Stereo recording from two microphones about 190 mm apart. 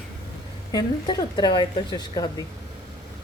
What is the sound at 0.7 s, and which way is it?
Speech, 20° left (ahead or behind).